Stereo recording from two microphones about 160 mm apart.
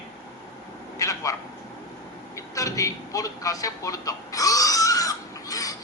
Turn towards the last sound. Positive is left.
turn(degrees=20)  # may be behind; listen again after turning